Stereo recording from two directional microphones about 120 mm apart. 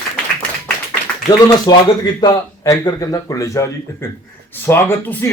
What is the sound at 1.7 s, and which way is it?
A man's voice, 35° left (ahead or behind).